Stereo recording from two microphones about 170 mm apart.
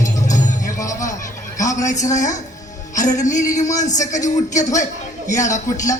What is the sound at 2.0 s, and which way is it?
Speech, 45° left (ahead or behind).